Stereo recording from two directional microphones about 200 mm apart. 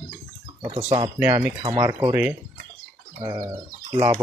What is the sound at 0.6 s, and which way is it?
Speech, 30° right (ahead or behind).